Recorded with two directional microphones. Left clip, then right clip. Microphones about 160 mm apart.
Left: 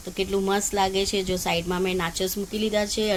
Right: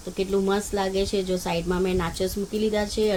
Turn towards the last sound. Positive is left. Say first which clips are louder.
# right 1 dB
turn(degrees=-5)  # may be behind; listen again after turning